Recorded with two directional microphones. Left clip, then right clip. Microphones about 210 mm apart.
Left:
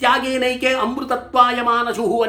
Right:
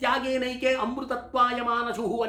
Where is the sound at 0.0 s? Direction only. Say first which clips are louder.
Left 9 dB; 5° left (ahead or behind).